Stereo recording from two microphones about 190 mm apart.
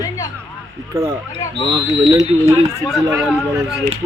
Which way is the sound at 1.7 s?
25° right (ahead or behind).